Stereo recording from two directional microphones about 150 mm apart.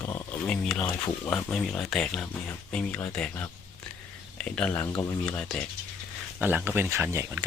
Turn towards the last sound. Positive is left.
turn(degrees=-15)  # may be behind; listen again after turning